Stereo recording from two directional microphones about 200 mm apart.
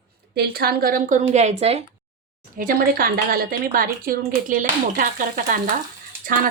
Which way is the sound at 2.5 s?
45° right (ahead or behind).